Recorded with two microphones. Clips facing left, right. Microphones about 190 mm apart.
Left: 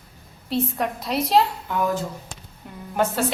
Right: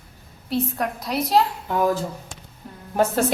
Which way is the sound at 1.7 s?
35° right (ahead or behind).